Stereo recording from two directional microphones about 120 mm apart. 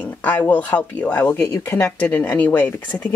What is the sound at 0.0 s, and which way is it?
Speech, 15° left (ahead or behind).